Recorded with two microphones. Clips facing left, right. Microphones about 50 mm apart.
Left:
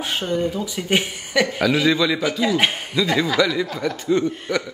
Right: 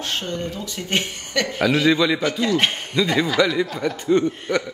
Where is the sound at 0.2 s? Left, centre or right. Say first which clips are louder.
Left 5 dB; centre.